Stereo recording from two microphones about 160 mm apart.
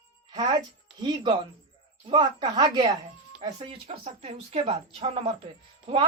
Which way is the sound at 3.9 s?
40° right (ahead or behind).